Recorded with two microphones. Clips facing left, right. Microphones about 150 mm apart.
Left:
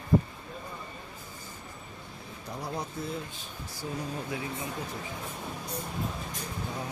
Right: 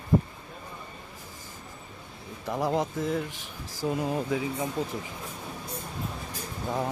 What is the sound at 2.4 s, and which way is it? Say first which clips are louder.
Speech: right 9 dB; 90° right.